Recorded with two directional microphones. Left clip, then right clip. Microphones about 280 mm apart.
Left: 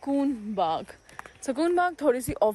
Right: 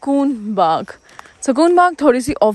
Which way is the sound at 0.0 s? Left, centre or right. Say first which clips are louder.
Right 10 dB; right.